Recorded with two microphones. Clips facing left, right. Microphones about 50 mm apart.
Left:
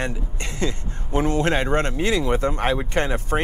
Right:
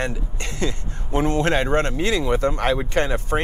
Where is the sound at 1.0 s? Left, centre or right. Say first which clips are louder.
Right 1 dB; right.